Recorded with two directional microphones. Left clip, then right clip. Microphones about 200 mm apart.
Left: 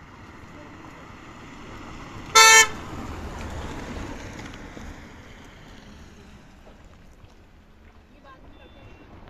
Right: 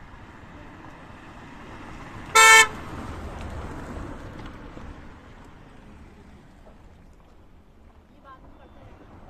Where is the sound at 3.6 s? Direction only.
45° left (ahead or behind).